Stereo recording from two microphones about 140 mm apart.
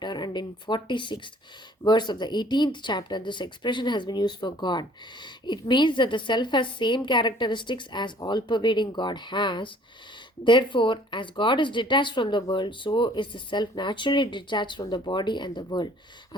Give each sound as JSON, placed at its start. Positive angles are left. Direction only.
{"t": 0.0, "sound": "speech", "side_deg": 30}